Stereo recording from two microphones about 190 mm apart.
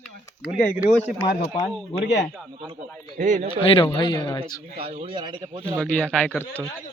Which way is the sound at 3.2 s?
40° right (ahead or behind).